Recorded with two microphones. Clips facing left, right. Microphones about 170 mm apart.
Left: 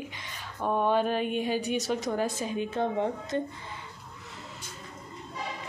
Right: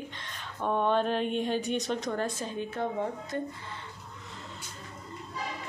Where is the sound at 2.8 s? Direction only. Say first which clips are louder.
Left 3 dB; 25° left (ahead or behind).